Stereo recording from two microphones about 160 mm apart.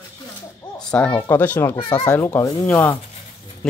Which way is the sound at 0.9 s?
5° left (ahead or behind).